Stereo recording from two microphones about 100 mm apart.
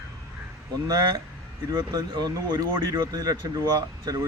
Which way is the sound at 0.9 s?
45° right (ahead or behind).